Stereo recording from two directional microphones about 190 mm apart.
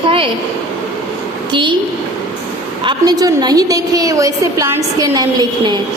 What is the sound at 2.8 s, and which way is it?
A woman's voice, 20° right (ahead or behind).